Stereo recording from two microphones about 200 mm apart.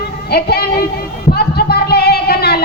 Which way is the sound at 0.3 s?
50° left (ahead or behind).